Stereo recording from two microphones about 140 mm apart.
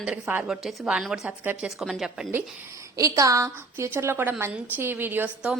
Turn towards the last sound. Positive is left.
turn(degrees=-10)  # may be behind; listen again after turning